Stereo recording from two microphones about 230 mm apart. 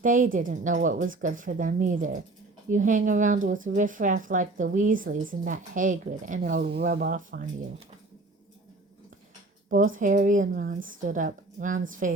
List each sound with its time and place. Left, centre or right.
0.0 s a woman's voice: right
9.6 s a woman's voice: right